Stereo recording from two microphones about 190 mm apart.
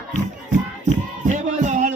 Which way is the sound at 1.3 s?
40° right (ahead or behind).